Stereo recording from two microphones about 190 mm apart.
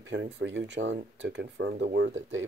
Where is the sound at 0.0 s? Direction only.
70° right (ahead or behind).